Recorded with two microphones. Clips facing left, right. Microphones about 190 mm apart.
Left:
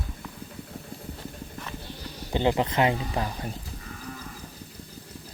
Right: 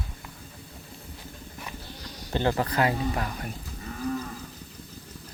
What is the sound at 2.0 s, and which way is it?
Speech, 15° left (ahead or behind).